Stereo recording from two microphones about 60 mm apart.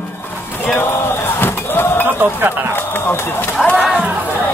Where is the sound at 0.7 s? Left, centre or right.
Left.